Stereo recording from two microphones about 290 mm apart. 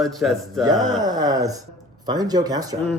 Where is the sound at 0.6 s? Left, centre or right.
Centre.